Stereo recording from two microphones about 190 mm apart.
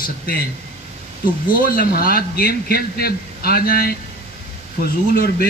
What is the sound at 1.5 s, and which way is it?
A man's voice, 50° left (ahead or behind).